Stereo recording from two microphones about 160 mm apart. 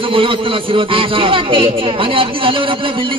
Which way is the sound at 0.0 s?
35° right (ahead or behind).